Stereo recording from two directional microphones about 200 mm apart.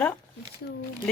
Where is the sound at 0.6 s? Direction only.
60° left (ahead or behind).